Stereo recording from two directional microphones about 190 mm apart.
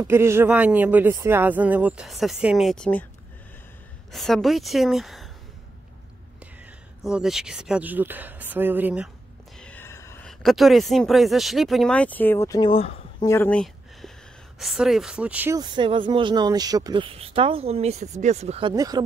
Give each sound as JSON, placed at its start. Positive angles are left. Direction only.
{"t": 0.0, "sound": "speech", "side_deg": -15}
{"t": 4.1, "sound": "speech", "side_deg": 0}
{"t": 6.4, "sound": "speech", "side_deg": -5}
{"t": 9.6, "sound": "a sound", "side_deg": 10}
{"t": 10.2, "sound": "speech", "side_deg": 0}
{"t": 13.2, "sound": "a sound", "side_deg": 10}
{"t": 14.6, "sound": "speech", "side_deg": 0}
{"t": 15.6, "sound": "speech", "side_deg": -25}